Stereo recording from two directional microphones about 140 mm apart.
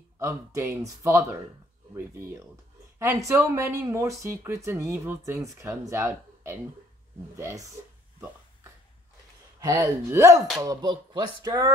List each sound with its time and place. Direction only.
0.2 s speech: 20° right (ahead or behind)
9.6 s speech: 25° right (ahead or behind)